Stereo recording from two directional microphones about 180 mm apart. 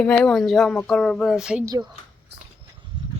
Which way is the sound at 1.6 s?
20° right (ahead or behind).